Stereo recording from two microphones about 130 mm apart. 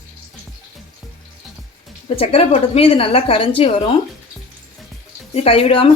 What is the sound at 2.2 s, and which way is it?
Speech, 50° left (ahead or behind).